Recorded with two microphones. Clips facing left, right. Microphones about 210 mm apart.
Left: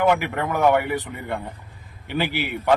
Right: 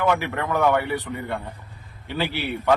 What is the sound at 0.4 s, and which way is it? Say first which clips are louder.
Speech: left 2 dB; 15° left (ahead or behind).